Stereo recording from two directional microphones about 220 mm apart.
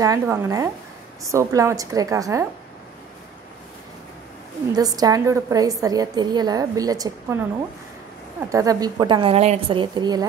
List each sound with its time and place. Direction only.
0.0 s a woman's voice: 15° right (ahead or behind)
4.7 s a woman's voice: 15° right (ahead or behind)